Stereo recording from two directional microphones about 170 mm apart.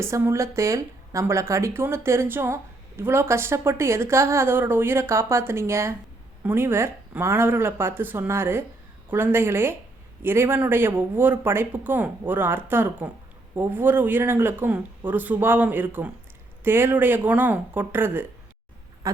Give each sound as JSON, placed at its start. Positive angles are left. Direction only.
{"t": 0.0, "sound": "speech", "side_deg": -15}
{"t": 19.0, "sound": "owl", "side_deg": -20}